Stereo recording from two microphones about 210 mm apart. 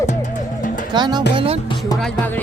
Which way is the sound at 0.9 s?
20° right (ahead or behind).